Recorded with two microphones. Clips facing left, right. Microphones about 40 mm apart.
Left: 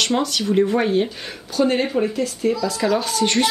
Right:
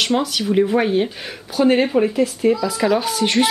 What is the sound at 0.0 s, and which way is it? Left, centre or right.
Speech, centre.